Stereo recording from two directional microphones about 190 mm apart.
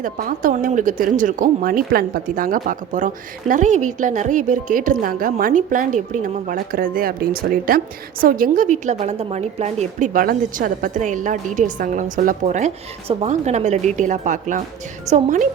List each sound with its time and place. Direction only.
0.0 s a woman's voice: 45° right (ahead or behind)